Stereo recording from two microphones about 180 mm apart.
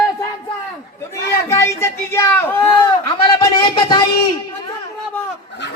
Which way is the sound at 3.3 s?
25° left (ahead or behind).